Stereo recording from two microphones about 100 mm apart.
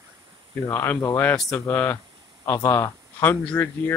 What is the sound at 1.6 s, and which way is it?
Speech, 20° left (ahead or behind).